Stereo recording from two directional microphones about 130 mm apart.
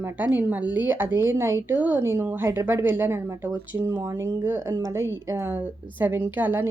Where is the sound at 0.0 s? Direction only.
15° right (ahead or behind).